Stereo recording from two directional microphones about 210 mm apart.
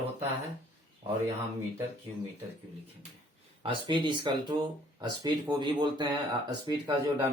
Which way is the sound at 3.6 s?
25° right (ahead or behind).